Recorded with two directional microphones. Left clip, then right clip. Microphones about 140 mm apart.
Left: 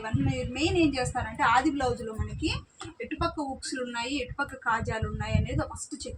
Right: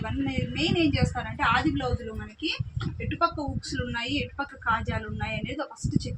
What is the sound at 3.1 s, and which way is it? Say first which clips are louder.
A woman's voice: right 4 dB; 20° right (ahead or behind).